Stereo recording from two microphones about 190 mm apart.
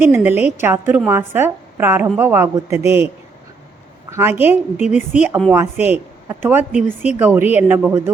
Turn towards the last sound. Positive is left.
turn(degrees=-10)  # may be behind; listen again after turning